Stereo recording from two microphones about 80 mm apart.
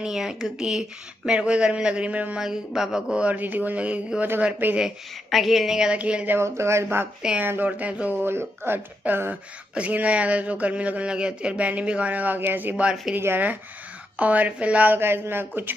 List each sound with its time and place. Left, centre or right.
0.0 s speech: centre
4.7 s speech: centre
6.3 s speech: right
7.2 s speech: centre
7.4 s speech: right